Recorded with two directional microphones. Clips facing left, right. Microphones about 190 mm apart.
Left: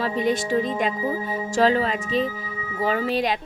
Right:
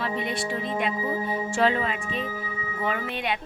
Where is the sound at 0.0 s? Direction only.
40° left (ahead or behind).